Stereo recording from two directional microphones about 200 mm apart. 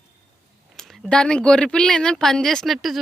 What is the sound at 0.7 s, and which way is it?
Speech, centre (ahead or behind).